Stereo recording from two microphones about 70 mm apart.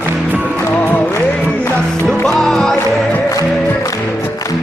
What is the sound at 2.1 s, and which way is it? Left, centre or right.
Music, centre.